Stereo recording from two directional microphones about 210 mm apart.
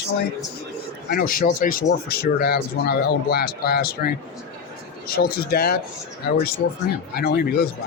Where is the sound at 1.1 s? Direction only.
45° left (ahead or behind).